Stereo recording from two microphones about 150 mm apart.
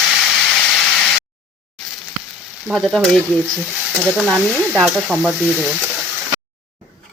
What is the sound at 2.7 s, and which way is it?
Speech, centre (ahead or behind).